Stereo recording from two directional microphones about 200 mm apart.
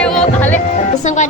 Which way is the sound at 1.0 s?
40° left (ahead or behind).